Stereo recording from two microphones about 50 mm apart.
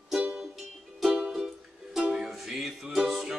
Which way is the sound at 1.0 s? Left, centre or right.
Centre.